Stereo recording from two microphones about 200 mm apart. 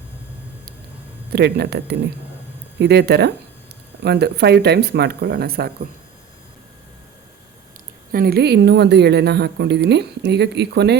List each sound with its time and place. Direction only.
1.3 s speech: 55° right (ahead or behind)
8.1 s speech: 50° right (ahead or behind)